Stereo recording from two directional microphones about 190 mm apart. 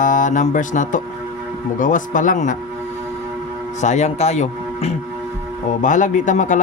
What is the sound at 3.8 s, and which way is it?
Speech, 35° left (ahead or behind).